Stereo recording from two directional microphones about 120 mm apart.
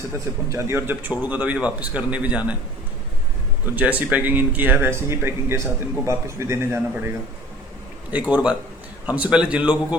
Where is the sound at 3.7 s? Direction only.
15° right (ahead or behind).